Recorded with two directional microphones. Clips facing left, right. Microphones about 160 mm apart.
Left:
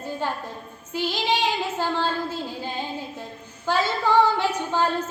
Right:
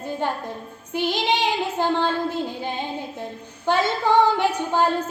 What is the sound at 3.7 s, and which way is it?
A woman's voice, 20° right (ahead or behind).